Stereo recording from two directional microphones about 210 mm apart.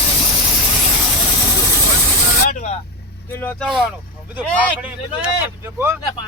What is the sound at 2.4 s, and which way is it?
Vehicle, 35° left (ahead or behind).